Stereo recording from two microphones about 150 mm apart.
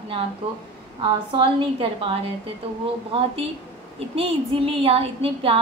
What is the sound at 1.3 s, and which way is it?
A woman's voice, 35° right (ahead or behind).